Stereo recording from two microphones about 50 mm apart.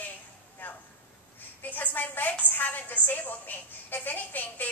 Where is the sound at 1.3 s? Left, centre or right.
Left.